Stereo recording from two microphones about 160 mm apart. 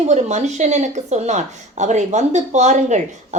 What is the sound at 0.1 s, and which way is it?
Speech, 45° right (ahead or behind).